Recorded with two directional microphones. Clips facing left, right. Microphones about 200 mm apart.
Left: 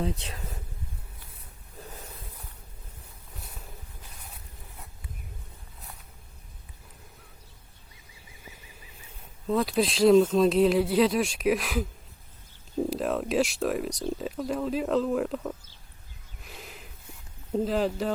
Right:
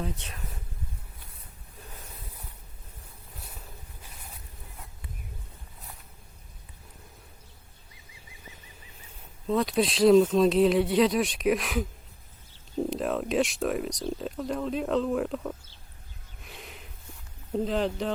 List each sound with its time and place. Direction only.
0.0 s speech: 30° left (ahead or behind)
3.3 s a sound: centre (ahead or behind)
9.5 s speech: centre (ahead or behind)
12.9 s speech: centre (ahead or behind)
16.4 s a sound: centre (ahead or behind)
17.5 s speech: 5° left (ahead or behind)